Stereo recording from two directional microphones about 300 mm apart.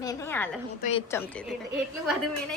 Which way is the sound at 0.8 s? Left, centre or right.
Left.